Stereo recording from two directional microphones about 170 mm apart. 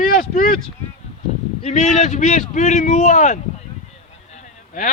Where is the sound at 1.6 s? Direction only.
45° left (ahead or behind).